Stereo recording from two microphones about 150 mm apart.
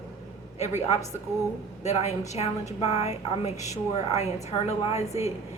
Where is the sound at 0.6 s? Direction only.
50° left (ahead or behind).